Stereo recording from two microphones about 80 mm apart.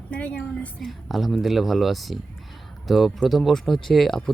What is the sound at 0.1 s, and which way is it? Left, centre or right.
Speech, centre.